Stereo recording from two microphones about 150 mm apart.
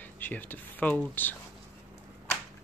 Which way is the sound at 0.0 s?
10° left (ahead or behind).